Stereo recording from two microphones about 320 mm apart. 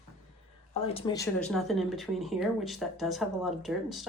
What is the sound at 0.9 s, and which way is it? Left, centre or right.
Speech, centre.